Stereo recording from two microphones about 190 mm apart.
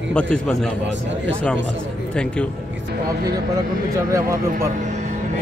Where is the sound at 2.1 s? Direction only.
5° left (ahead or behind).